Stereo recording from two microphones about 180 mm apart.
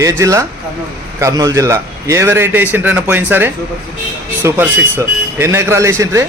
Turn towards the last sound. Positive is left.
turn(degrees=-15)  # may be behind; listen again after turning